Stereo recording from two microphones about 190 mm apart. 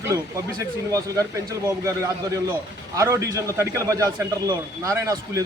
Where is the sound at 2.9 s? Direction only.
15° right (ahead or behind).